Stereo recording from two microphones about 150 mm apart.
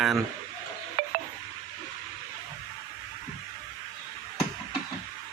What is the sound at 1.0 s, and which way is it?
Music, 65° right (ahead or behind).